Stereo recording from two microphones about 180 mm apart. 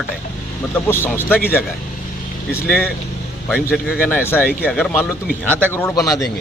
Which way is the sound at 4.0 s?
10° left (ahead or behind).